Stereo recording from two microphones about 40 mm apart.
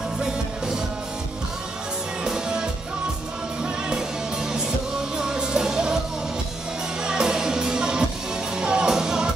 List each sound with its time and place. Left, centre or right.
2.2 s music: centre
7.0 s music: centre